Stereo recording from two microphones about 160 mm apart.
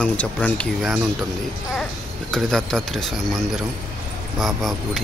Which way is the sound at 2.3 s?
5° left (ahead or behind).